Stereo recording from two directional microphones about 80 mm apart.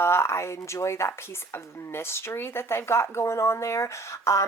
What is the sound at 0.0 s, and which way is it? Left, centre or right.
Speech, left.